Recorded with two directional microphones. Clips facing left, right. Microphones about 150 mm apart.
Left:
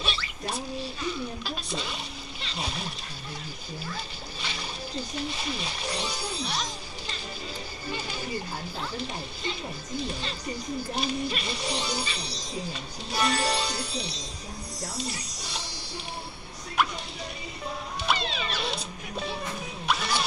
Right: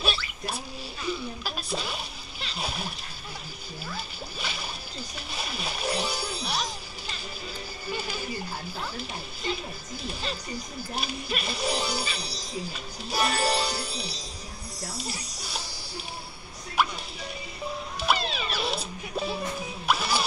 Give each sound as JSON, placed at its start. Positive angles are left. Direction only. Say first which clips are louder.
{"t": 0.0, "sound": "rodents", "louder": "right 2 dB", "side_deg": -5}
{"t": 1.4, "sound": "music", "louder": "right 1 dB", "side_deg": -5}
{"t": 2.4, "sound": "splash", "louder": "right 1 dB", "side_deg": -5}
{"t": 3.9, "sound": "splash", "louder": "right 1 dB", "side_deg": -5}
{"t": 7.9, "sound": "a sound", "louder": "right 2 dB", "side_deg": -5}
{"t": 9.5, "sound": "music", "louder": "right 2 dB", "side_deg": -5}
{"t": 11.0, "sound": "speech", "louder": "left 1 dB", "side_deg": -5}
{"t": 14.8, "sound": "music", "louder": "left 1 dB", "side_deg": -5}
{"t": 18.0, "sound": "music", "louder": "right 2 dB", "side_deg": -5}